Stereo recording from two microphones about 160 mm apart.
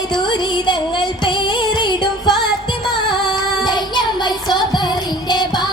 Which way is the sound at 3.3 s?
30° left (ahead or behind).